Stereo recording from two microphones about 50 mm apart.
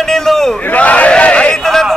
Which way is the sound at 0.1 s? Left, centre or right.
Centre.